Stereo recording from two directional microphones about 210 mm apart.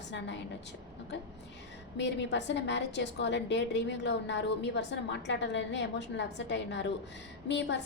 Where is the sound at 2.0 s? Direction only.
55° left (ahead or behind).